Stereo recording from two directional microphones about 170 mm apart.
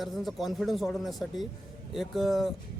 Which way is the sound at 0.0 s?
Centre (ahead or behind).